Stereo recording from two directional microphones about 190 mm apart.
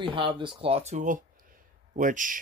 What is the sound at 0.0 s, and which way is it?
Speech, 25° right (ahead or behind).